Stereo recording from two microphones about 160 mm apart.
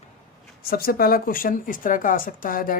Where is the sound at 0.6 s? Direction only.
70° left (ahead or behind).